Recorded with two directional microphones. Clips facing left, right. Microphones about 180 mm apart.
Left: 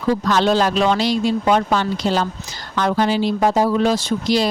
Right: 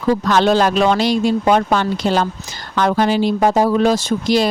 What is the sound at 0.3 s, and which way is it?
Speech, 55° right (ahead or behind).